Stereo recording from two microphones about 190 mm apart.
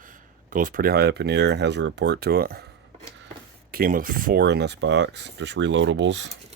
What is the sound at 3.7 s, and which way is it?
Speech, 45° right (ahead or behind).